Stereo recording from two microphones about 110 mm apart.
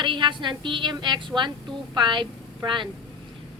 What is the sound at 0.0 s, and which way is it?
A woman's voice, 45° right (ahead or behind).